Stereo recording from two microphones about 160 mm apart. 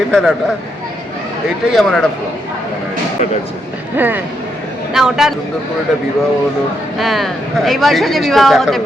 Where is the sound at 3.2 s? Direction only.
50° left (ahead or behind).